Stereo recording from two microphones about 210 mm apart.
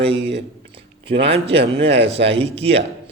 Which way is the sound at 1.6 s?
55° right (ahead or behind).